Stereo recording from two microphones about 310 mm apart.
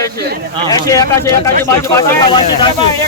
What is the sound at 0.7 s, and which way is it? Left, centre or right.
Speech, centre.